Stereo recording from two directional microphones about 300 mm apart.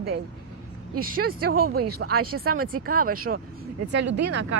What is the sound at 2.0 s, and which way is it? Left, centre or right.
Speech, right.